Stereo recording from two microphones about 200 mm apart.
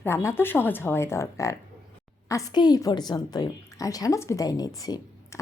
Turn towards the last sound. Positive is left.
turn(degrees=15)  # may be behind; listen again after turning